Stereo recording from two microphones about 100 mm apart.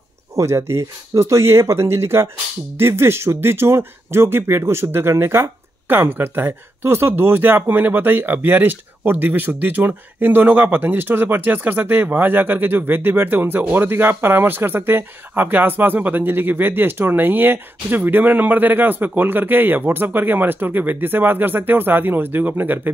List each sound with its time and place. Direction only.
0.4 s speech: 25° right (ahead or behind)